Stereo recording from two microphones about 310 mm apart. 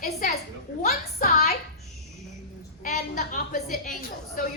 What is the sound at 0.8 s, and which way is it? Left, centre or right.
Speech, left.